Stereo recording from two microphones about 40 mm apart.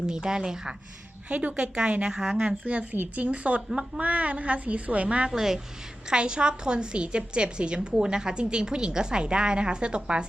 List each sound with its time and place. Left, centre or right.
0.1 s a woman's voice: centre
1.3 s a woman's voice: right; by 2.6 s centre
2.6 s a woman's voice: right
3.7 s a woman's voice: right
4.0 s a woman's voice: right
5.3 s a woman's voice: centre
6.1 s a woman's voice: right